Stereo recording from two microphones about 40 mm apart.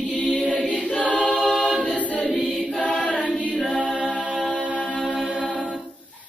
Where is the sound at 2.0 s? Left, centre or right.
Left.